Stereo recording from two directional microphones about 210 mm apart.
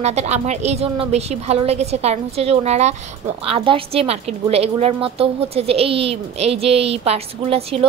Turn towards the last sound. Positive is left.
turn(degrees=-30)  # may be behind; listen again after turning